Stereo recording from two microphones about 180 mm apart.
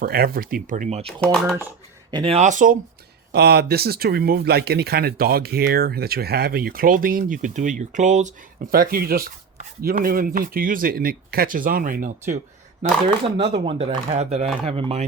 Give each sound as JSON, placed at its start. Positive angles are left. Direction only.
{"t": 0.0, "sound": "speech", "side_deg": -55}
{"t": 1.0, "sound": "speech", "side_deg": 5}
{"t": 2.0, "sound": "speech", "side_deg": -25}
{"t": 2.4, "sound": "speech", "side_deg": -45}
{"t": 3.3, "sound": "speech", "side_deg": -65}
{"t": 8.7, "sound": "speech", "side_deg": -55}
{"t": 13.2, "sound": "speech", "side_deg": -30}